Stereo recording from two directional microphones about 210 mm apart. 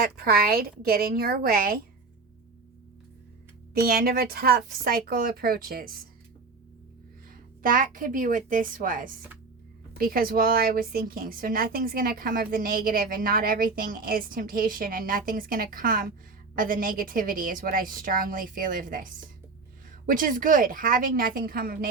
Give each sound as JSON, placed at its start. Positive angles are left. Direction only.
{"t": 0.0, "sound": "a woman's voice", "side_deg": -45}
{"t": 3.8, "sound": "a woman's voice", "side_deg": -45}
{"t": 7.6, "sound": "a woman's voice", "side_deg": -40}